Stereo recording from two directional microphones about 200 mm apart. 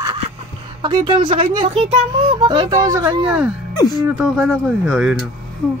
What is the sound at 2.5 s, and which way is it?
Speech, 20° right (ahead or behind).